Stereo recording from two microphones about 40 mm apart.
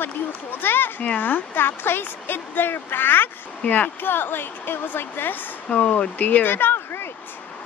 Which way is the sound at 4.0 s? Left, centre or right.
Left.